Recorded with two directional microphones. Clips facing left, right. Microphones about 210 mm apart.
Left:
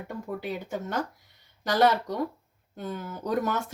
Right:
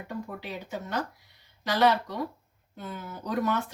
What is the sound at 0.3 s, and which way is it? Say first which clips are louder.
Speech: left 4 dB; 45° left (ahead or behind).